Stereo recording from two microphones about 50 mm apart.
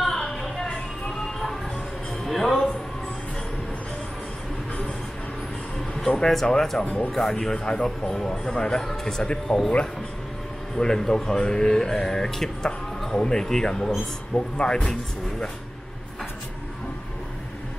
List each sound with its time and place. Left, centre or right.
0.0 s music: centre
5.8 s speech: centre
10.8 s speech: centre
14.3 s speech: left